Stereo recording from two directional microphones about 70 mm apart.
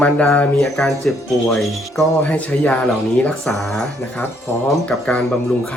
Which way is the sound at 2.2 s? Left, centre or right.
Centre.